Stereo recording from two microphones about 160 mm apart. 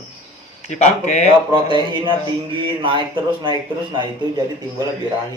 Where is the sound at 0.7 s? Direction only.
50° left (ahead or behind).